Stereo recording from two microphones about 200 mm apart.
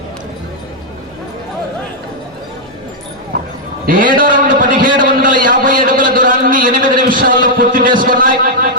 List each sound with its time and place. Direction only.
3.8 s a man's voice: 45° right (ahead or behind)